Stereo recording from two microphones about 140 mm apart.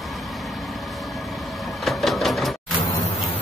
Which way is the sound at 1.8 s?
Centre (ahead or behind).